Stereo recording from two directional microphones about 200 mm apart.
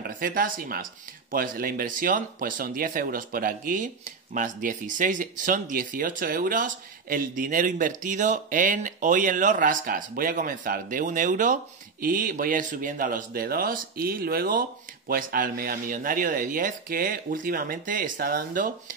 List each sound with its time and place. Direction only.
0.0 s speech: 45° right (ahead or behind)